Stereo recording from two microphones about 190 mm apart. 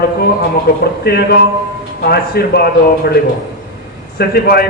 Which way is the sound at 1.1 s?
55° left (ahead or behind).